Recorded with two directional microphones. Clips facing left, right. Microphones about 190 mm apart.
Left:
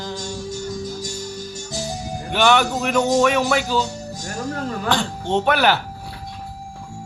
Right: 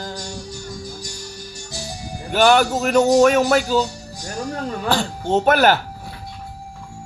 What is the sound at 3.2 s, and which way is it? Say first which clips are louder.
Mantra: right 4 dB; 45° right (ahead or behind).